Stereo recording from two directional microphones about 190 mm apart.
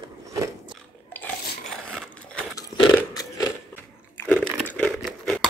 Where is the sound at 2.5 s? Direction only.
20° left (ahead or behind).